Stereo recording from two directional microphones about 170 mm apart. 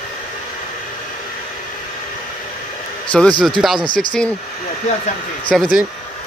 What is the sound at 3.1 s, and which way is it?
Speech, 5° left (ahead or behind).